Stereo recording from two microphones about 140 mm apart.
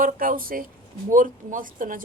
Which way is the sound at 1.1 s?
70° right (ahead or behind).